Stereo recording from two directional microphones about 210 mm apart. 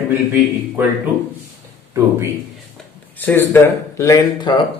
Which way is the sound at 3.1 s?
10° left (ahead or behind).